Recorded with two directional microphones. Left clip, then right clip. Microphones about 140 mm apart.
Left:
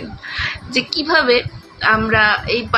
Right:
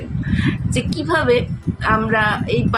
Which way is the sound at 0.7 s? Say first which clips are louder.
Left 5 dB; 20° right (ahead or behind).